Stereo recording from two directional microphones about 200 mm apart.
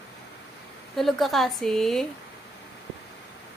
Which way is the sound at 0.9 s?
Centre (ahead or behind).